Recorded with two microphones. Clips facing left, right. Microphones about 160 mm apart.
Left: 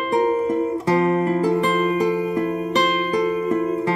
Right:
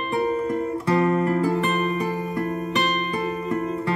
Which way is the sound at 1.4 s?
10° left (ahead or behind).